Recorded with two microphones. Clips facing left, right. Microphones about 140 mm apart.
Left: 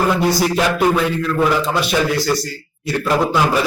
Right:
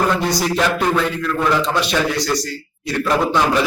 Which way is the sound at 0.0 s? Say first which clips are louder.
Left 2 dB; 5° left (ahead or behind).